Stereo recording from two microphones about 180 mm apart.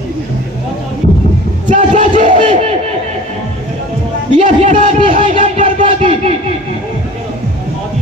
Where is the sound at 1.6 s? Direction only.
45° right (ahead or behind).